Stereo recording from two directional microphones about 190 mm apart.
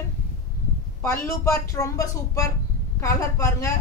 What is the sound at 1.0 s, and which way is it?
Speech, 15° left (ahead or behind).